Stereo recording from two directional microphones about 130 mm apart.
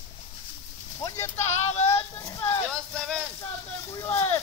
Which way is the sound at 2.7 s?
5° left (ahead or behind).